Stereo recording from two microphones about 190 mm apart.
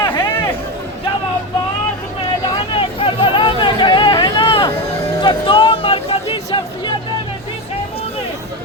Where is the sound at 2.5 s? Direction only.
30° left (ahead or behind).